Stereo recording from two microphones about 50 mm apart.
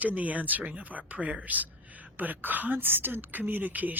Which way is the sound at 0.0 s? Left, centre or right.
Right.